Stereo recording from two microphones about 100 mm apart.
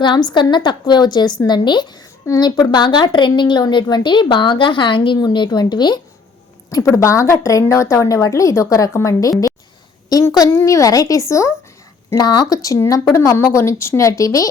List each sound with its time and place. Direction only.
0.0 s a woman's voice: 50° left (ahead or behind)
2.2 s a woman's voice: 40° left (ahead or behind)
6.7 s a woman's voice: 35° left (ahead or behind)
12.1 s a woman's voice: 40° left (ahead or behind)